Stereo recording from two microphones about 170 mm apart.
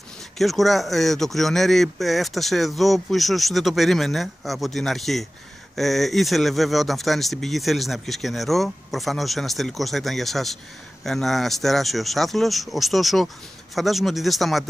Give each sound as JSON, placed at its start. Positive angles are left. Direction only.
{"t": 0.4, "sound": "speech", "side_deg": 0}